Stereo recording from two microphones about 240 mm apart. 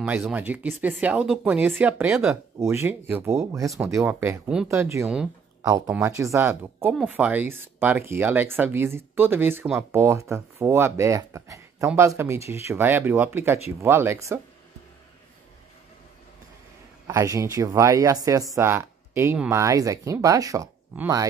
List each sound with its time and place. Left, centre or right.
0.0 s speech: centre
5.6 s speech: centre
17.1 s speech: centre